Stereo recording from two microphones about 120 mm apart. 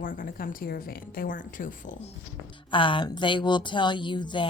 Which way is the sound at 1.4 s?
90° left.